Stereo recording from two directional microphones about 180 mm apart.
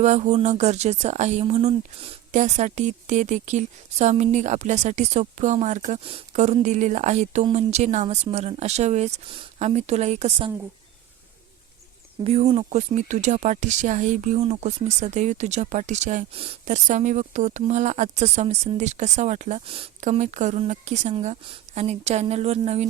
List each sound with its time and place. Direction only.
0.0 s speech: 40° right (ahead or behind)
12.2 s speech: 35° right (ahead or behind)